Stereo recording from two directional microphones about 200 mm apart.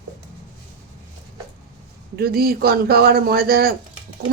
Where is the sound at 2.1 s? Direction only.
50° right (ahead or behind).